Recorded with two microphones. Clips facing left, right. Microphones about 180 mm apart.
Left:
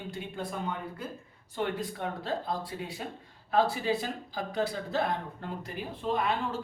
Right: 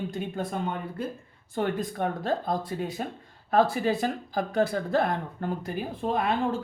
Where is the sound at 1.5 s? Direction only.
50° right (ahead or behind).